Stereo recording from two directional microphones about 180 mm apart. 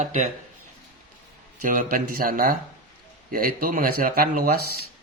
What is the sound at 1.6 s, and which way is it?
Speech, 50° right (ahead or behind).